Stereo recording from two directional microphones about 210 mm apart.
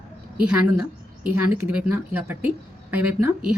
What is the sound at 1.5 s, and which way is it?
Speech, 5° right (ahead or behind).